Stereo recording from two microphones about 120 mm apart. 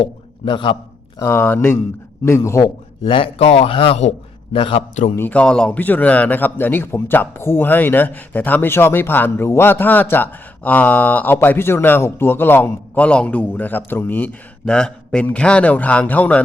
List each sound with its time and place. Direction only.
0.0 s a man's voice: 40° left (ahead or behind)
1.2 s speech: 20° left (ahead or behind)
2.6 s a man's voice: 45° left (ahead or behind)
5.1 s a man's voice: 15° left (ahead or behind)